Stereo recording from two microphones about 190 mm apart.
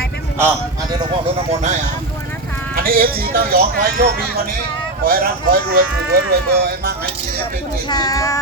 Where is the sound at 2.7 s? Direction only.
50° right (ahead or behind).